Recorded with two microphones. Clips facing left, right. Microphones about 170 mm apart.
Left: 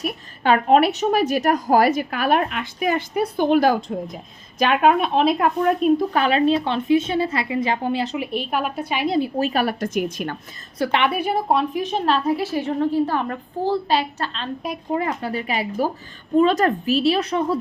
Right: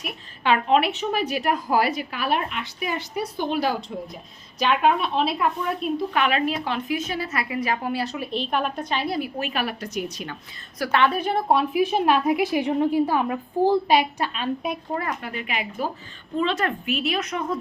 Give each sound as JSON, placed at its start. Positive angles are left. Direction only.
{"t": 0.0, "sound": "a woman's voice", "side_deg": 45}
{"t": 9.0, "sound": "speech", "side_deg": 25}
{"t": 9.4, "sound": "a woman's voice", "side_deg": 40}
{"t": 10.8, "sound": "a woman's voice", "side_deg": 20}
{"t": 15.2, "sound": "speech", "side_deg": 35}